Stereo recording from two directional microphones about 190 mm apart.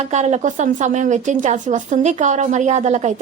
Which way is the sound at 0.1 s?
40° right (ahead or behind).